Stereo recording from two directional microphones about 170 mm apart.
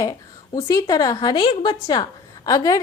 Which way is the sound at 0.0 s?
20° left (ahead or behind).